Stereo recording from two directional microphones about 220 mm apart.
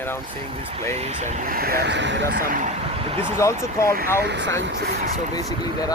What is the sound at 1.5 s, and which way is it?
Speech, 45° right (ahead or behind).